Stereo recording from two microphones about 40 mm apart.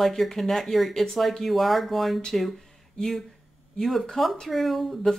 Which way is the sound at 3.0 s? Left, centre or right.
Centre.